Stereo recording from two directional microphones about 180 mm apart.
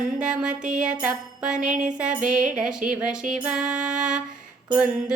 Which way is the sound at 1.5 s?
45° right (ahead or behind).